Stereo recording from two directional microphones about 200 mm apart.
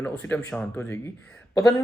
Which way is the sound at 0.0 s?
10° left (ahead or behind).